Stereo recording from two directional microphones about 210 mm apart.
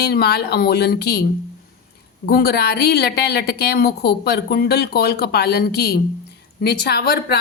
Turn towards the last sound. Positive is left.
turn(degrees=50)  # may be behind; listen again after turning